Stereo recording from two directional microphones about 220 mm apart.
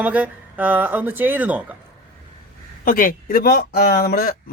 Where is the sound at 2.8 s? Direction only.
40° left (ahead or behind).